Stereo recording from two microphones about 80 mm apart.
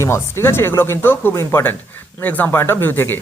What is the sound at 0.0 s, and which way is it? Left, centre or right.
Speech, left.